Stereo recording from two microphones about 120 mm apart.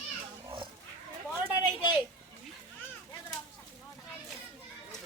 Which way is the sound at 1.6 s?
40° left (ahead or behind).